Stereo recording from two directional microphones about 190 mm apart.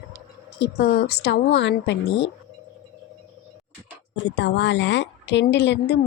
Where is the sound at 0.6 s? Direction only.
60° left (ahead or behind).